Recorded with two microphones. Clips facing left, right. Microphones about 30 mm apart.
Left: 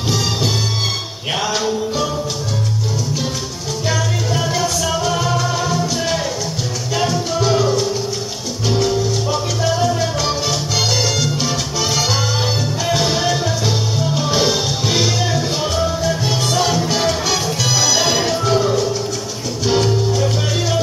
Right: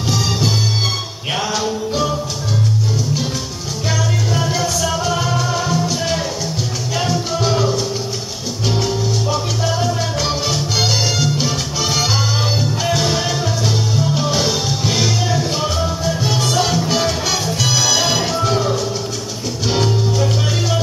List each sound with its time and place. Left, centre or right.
4.3 s music: centre